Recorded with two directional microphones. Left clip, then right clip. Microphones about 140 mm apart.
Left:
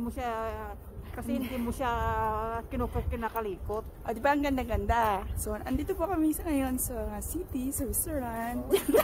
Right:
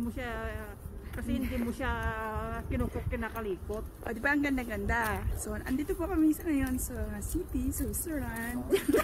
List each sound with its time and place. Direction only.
0.2 s speech: 35° left (ahead or behind)
3.2 s a woman's voice: 30° left (ahead or behind)